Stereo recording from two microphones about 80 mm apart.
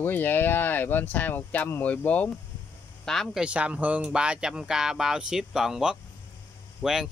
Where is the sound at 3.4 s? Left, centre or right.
Centre.